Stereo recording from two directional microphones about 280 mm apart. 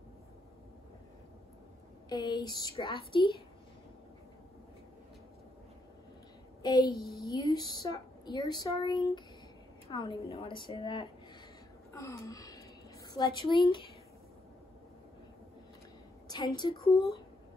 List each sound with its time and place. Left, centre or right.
2.0 s a woman's voice: centre
6.6 s a child's voice: centre
11.9 s wail: centre
13.1 s a woman's voice: centre
16.3 s a woman's voice: centre